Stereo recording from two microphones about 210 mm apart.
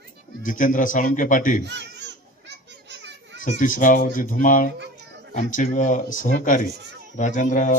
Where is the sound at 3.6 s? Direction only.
40° left (ahead or behind).